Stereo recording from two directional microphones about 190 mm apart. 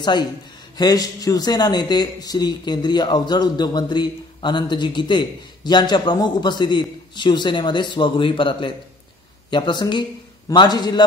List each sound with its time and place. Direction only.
0.7 s a man's voice: 20° left (ahead or behind)